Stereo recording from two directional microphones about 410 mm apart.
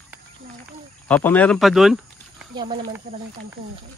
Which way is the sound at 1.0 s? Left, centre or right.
Centre.